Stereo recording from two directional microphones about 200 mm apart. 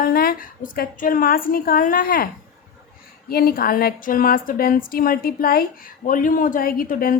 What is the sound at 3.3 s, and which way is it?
Speech, 50° left (ahead or behind).